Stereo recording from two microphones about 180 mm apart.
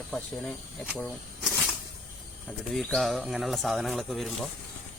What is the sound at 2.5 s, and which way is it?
Speech, centre (ahead or behind).